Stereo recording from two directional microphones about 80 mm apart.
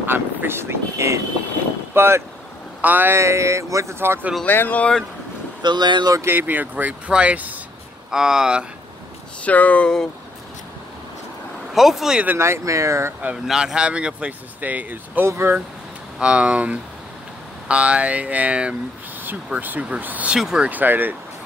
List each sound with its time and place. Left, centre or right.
0.0 s speech: right
3.2 s speech: right
4.5 s speech: left
5.6 s speech: right
6.2 s speech: right
8.1 s speech: centre
9.4 s speech: centre
11.7 s speech: centre
12.4 s speech: right
13.5 s speech: centre; by 15.6 s right
16.2 s speech: centre
20.3 s speech: centre
20.6 s speech: right